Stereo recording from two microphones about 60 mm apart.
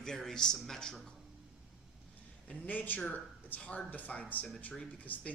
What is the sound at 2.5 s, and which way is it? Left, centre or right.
Speech, left.